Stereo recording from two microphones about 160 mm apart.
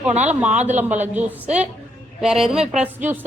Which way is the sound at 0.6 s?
50° right (ahead or behind).